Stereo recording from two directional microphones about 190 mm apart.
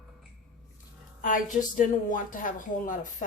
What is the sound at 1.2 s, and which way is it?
A woman's voice, 40° left (ahead or behind).